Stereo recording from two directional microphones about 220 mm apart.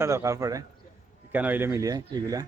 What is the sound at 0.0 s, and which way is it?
A man's voice, 15° right (ahead or behind).